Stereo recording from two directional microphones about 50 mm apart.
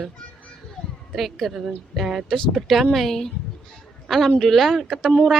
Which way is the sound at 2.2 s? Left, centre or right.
Centre.